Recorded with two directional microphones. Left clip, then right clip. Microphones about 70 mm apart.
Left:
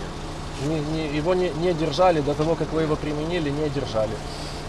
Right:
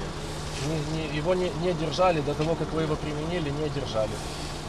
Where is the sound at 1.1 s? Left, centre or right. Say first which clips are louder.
Left 3 dB; left.